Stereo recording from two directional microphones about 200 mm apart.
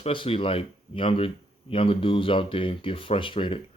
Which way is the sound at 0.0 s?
25° left (ahead or behind).